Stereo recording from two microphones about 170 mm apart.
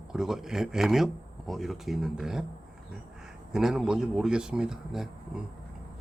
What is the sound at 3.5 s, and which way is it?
Speech, centre (ahead or behind).